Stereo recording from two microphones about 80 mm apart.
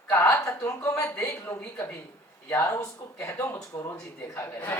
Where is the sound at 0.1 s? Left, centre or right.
Left.